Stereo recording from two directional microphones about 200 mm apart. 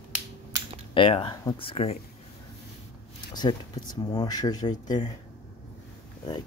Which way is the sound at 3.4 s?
20° left (ahead or behind).